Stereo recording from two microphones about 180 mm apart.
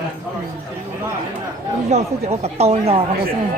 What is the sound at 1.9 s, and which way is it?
Speech, 35° right (ahead or behind).